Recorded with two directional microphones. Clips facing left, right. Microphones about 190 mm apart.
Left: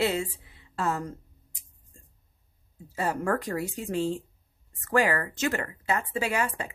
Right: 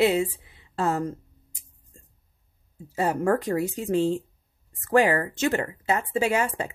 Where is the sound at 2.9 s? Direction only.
25° right (ahead or behind).